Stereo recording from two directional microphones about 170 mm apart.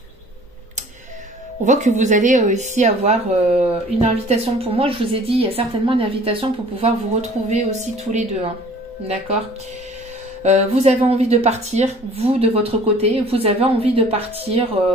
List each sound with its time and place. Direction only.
1.6 s speech: 45° right (ahead or behind)
10.4 s speech: 40° right (ahead or behind)